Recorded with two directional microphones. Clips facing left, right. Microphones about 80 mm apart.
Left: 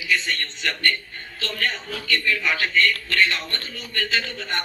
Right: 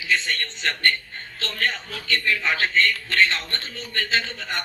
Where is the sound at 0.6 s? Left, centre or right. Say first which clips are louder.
Right 1 dB; right.